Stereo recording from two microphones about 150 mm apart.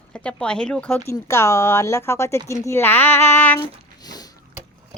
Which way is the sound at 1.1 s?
20° left (ahead or behind).